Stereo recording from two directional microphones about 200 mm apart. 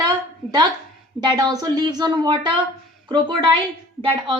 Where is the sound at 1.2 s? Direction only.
20° right (ahead or behind).